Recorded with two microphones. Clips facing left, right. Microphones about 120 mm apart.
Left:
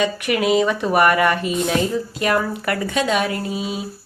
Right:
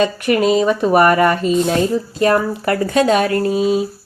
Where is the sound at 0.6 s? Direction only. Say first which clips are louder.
Right 4 dB; 25° right (ahead or behind); by 3.6 s 50° right (ahead or behind).